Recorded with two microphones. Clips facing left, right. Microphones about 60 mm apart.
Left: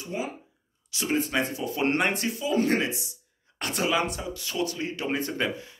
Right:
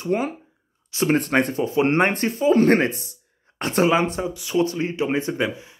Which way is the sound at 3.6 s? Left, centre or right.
Right.